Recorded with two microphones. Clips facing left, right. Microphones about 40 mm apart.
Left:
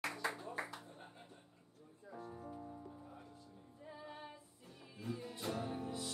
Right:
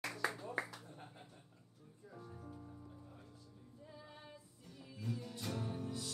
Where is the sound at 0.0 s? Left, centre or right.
Left.